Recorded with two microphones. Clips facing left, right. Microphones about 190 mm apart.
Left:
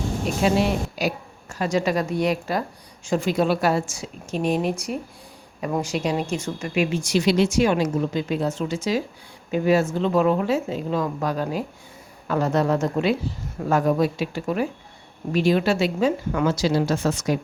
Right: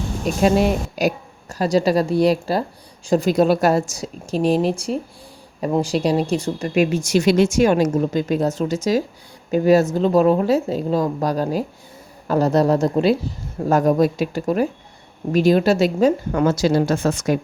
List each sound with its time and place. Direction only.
0.4 s a woman's voice: 45° right (ahead or behind)